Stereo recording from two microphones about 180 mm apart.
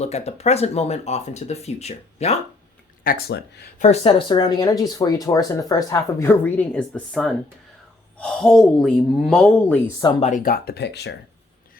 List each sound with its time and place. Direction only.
0.0 s speech: 35° left (ahead or behind)
3.0 s speech: 55° left (ahead or behind)
3.8 s a woman's voice: 40° left (ahead or behind); by 9.9 s 10° left (ahead or behind)
10.2 s speech: 45° left (ahead or behind); by 11.2 s 70° left (ahead or behind)